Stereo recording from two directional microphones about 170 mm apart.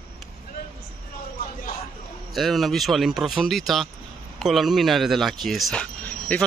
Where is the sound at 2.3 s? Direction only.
Centre (ahead or behind).